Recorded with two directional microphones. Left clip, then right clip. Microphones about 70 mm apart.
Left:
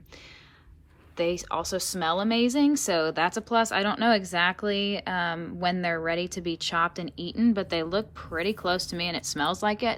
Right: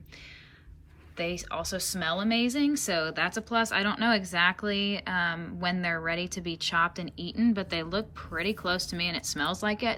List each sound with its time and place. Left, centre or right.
1.1 s a woman's voice: left